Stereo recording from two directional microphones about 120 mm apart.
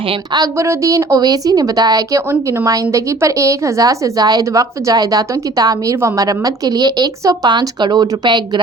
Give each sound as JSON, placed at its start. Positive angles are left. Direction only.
{"t": 0.3, "sound": "a woman's voice", "side_deg": -30}